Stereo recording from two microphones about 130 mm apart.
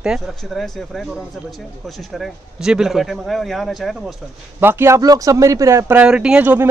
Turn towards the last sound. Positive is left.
turn(degrees=-15)  # may be behind; listen again after turning